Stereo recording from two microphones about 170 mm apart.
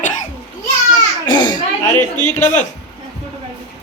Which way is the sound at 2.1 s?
45° left (ahead or behind).